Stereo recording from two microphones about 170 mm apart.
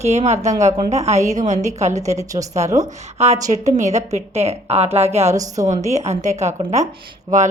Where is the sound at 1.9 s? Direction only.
20° right (ahead or behind).